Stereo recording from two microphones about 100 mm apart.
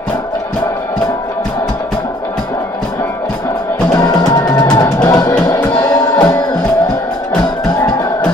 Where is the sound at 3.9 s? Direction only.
40° left (ahead or behind).